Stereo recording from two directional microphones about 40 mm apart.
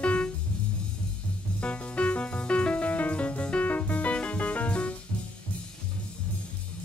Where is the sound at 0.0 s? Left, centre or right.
Left.